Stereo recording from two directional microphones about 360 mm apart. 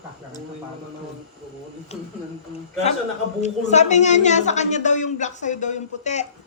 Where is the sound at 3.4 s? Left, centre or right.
Centre.